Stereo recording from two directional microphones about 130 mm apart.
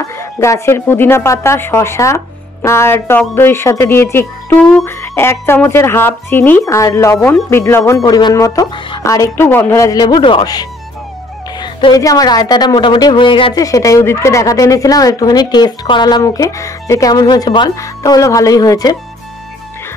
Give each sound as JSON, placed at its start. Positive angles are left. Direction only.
{"t": 0.2, "sound": "a woman's voice", "side_deg": 20}
{"t": 13.6, "sound": "a woman's voice", "side_deg": 25}